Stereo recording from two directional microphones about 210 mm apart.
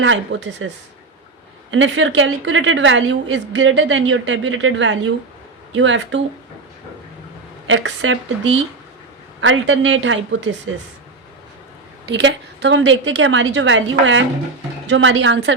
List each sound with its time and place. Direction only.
0.0 s a woman's voice: 60° right (ahead or behind)
1.7 s a woman's voice: 65° right (ahead or behind)
7.7 s a woman's voice: 60° right (ahead or behind)
12.0 s a woman's voice: 55° right (ahead or behind)